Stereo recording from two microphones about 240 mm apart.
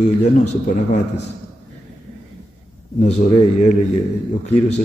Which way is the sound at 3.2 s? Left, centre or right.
Left.